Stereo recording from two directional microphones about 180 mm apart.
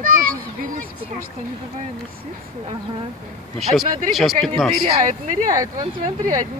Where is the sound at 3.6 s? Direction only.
Centre (ahead or behind).